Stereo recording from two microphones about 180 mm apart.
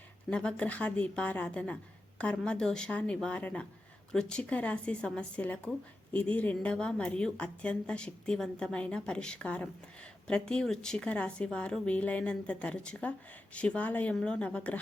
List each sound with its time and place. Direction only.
0.3 s a woman's voice: 5° left (ahead or behind)